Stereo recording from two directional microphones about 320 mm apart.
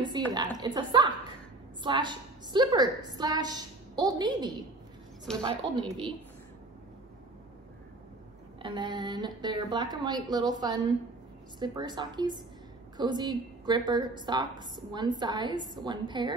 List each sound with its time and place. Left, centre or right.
0.2 s a woman's voice: centre
8.6 s a woman's voice: centre
11.6 s a woman's voice: centre